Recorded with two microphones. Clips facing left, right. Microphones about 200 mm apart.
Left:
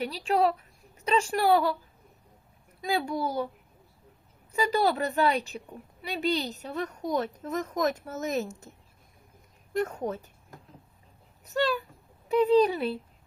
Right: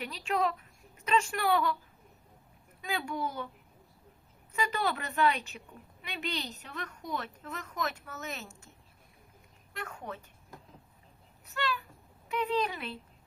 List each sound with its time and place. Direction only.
0.0 s a woman's voice: 35° left (ahead or behind)
2.8 s a woman's voice: 35° left (ahead or behind)
4.5 s a woman's voice: 35° left (ahead or behind)
9.7 s a woman's voice: 40° left (ahead or behind)
11.5 s a woman's voice: 35° left (ahead or behind)